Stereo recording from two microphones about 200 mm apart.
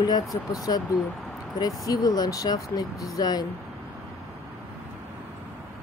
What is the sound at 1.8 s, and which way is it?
Speech, 20° left (ahead or behind).